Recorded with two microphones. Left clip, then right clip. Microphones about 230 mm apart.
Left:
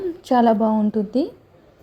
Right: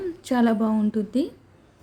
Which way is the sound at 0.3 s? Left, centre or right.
Centre.